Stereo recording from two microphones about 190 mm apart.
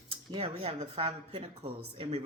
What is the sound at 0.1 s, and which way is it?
A woman's voice, 30° right (ahead or behind).